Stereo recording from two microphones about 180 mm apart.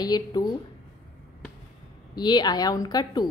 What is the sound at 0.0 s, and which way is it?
Speech, 20° left (ahead or behind).